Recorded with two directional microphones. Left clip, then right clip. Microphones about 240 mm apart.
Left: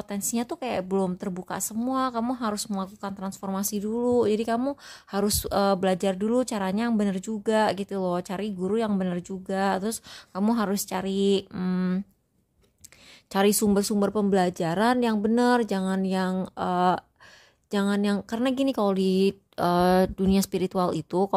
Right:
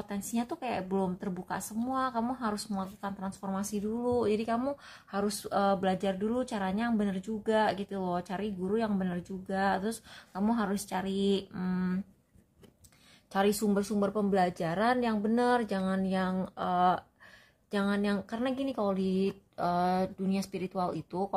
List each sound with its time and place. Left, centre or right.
0.0 s a woman's voice: left
13.3 s a woman's voice: left